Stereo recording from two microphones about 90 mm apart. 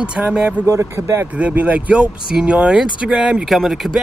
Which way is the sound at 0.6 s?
35° right (ahead or behind).